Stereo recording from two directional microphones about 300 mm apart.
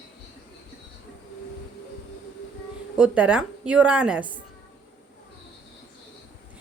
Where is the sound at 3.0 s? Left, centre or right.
Centre.